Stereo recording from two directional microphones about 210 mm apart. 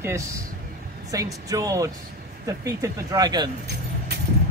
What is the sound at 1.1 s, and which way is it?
A woman's voice, 15° right (ahead or behind).